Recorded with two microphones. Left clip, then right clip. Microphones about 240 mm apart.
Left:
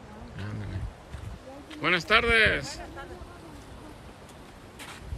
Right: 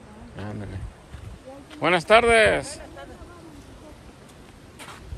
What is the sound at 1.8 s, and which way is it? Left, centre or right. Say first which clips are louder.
Speech: right 6 dB; centre.